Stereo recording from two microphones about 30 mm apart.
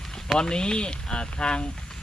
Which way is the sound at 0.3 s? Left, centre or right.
Left.